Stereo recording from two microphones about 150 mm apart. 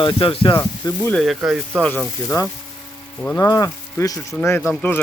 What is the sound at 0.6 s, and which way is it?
Speech, 20° left (ahead or behind).